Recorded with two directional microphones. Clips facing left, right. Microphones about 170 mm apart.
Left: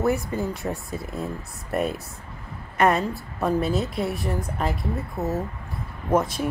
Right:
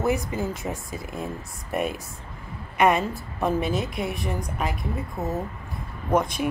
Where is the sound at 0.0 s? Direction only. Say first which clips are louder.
Left 1 dB; centre (ahead or behind).